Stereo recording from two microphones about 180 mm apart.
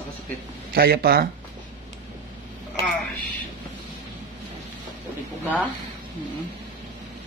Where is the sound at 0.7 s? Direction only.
60° right (ahead or behind).